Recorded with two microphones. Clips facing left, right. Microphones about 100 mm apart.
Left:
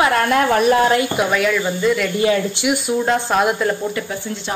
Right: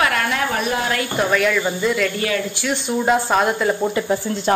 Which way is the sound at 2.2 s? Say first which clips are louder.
Left 5 dB; 25° left (ahead or behind).